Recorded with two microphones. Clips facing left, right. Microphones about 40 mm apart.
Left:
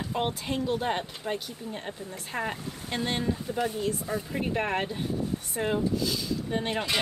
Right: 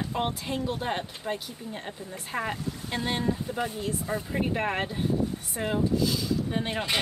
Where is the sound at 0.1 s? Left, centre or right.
Centre.